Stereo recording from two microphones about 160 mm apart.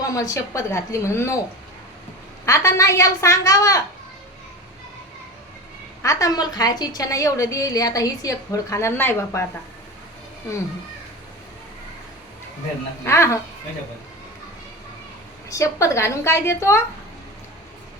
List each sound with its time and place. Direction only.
0.1 s a woman's voice: 20° left (ahead or behind)
2.5 s a woman's voice: 20° left (ahead or behind)
6.0 s a woman's voice: 20° left (ahead or behind)
13.1 s a woman's voice: 15° left (ahead or behind)
15.4 s a woman's voice: 20° left (ahead or behind)